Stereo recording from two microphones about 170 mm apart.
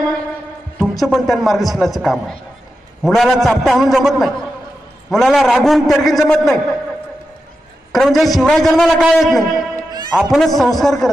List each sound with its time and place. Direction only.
0.9 s a man's voice: centre (ahead or behind)
7.9 s a woman's voice: centre (ahead or behind)
9.8 s music: 25° right (ahead or behind)
10.3 s a man's voice: centre (ahead or behind)